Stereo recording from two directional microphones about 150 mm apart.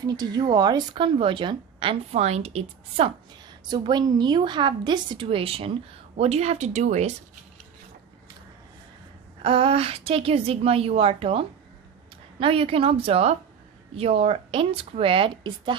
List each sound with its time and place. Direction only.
0.0 s a woman's voice: 25° right (ahead or behind); by 3.1 s 40° right (ahead or behind)
3.7 s a woman's voice: 30° right (ahead or behind); by 7.1 s 50° right (ahead or behind)
9.4 s a woman's voice: 35° right (ahead or behind)